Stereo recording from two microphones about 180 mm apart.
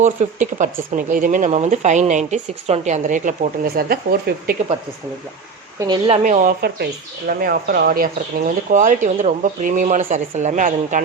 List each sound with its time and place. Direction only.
0.0 s speech: 45° right (ahead or behind)
6.1 s speech: 40° right (ahead or behind)